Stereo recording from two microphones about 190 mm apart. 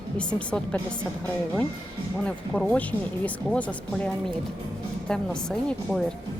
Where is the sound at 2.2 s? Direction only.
5° left (ahead or behind).